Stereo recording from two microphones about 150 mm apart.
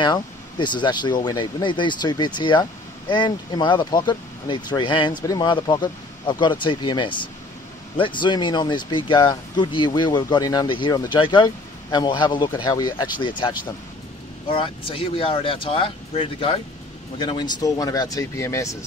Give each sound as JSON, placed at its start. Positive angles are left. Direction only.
{"t": 0.0, "sound": "speech", "side_deg": 30}
{"t": 14.5, "sound": "speech", "side_deg": 35}